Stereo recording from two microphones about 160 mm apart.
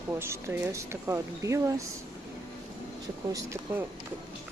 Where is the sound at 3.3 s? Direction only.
15° right (ahead or behind).